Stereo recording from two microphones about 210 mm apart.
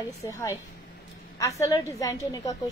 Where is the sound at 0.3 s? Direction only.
15° left (ahead or behind).